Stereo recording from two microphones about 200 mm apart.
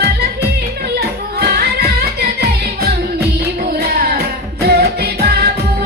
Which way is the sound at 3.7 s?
50° right (ahead or behind).